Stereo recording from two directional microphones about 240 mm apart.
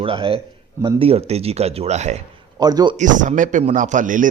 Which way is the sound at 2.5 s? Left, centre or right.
Centre.